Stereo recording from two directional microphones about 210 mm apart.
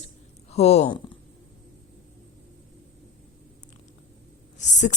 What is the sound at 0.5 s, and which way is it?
Speech, 30° left (ahead or behind).